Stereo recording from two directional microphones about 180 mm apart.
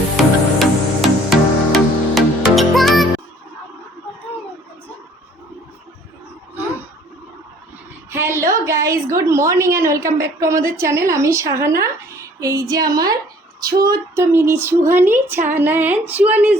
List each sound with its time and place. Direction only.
0.2 s music: centre (ahead or behind)
8.1 s a woman's voice: 15° right (ahead or behind)